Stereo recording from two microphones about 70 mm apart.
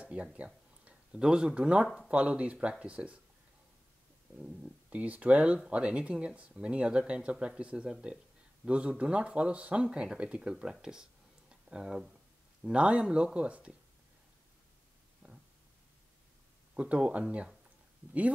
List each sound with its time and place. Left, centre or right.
0.0 s speech: centre
4.4 s speech: centre
16.7 s speech: centre